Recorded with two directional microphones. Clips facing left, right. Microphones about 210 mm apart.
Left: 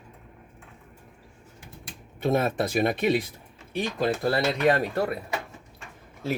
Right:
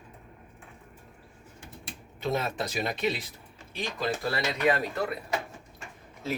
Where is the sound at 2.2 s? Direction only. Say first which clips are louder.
Left 6 dB; 55° left (ahead or behind).